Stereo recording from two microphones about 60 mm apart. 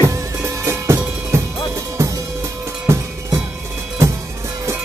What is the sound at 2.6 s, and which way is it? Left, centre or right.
Drum, right.